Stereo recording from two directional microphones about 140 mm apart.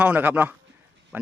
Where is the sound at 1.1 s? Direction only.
10° right (ahead or behind).